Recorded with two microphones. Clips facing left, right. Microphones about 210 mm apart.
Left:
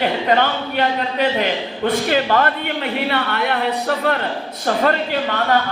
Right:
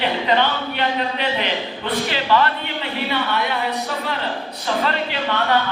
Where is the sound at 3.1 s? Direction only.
60° left (ahead or behind).